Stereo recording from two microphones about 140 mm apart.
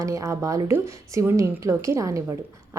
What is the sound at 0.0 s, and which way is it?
A woman's voice, 20° right (ahead or behind).